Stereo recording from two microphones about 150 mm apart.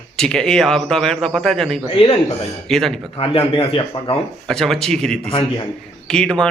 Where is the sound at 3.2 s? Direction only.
35° left (ahead or behind).